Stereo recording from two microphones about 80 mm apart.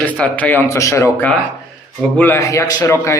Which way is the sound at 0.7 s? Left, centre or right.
Left.